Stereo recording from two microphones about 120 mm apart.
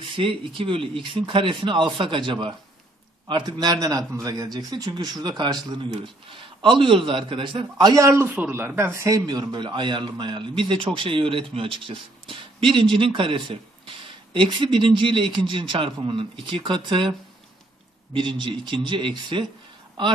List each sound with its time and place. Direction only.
0.1 s speech: 45° right (ahead or behind)
18.1 s speech: 45° right (ahead or behind)